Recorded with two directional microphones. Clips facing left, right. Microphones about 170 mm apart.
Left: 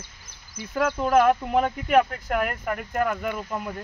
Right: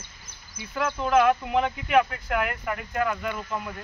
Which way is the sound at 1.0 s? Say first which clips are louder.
Left 1 dB; 40° left (ahead or behind).